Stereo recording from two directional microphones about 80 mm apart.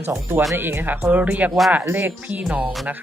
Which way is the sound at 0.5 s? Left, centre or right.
Right.